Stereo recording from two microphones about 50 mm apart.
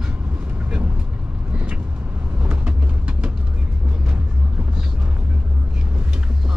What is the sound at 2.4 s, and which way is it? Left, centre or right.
Vehicle, right.